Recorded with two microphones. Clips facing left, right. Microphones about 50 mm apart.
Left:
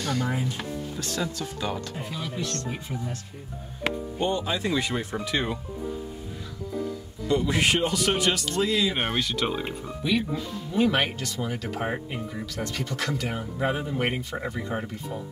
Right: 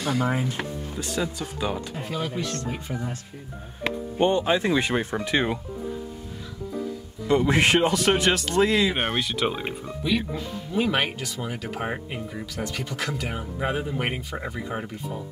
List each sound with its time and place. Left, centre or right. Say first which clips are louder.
0.0 s speech: right 3 dB; centre
0.3 s speech: right 3 dB; right
0.9 s speech: right 4 dB; centre
2.0 s speech: right 5 dB; right
2.3 s speech: right 2 dB; centre
4.2 s speech: right 6 dB; right
7.2 s speech: right 3 dB; right
8.9 s speech: right 1 dB; centre